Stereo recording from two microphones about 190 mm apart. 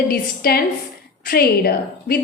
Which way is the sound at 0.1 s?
55° left (ahead or behind).